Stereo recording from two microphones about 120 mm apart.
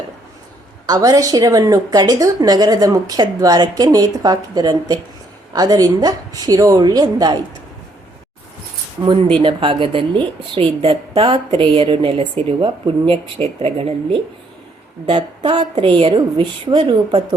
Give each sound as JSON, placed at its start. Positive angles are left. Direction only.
{"t": 0.9, "sound": "a woman's voice", "side_deg": -35}
{"t": 9.0, "sound": "a woman's voice", "side_deg": -40}
{"t": 15.4, "sound": "a woman's voice", "side_deg": -40}
{"t": 16.4, "sound": "a woman's voice", "side_deg": -35}